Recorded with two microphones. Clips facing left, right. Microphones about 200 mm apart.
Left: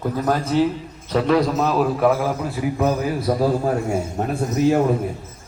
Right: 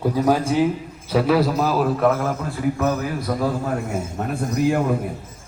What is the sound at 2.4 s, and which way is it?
A man's voice, 15° left (ahead or behind).